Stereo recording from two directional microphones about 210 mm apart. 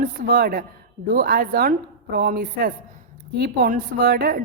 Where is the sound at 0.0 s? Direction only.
45° right (ahead or behind).